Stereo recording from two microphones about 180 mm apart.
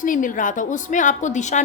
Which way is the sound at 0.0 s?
45° left (ahead or behind).